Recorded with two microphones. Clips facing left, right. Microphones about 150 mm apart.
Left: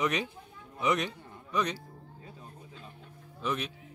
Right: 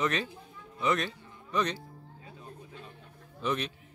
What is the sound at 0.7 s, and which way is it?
A man's voice, 15° left (ahead or behind).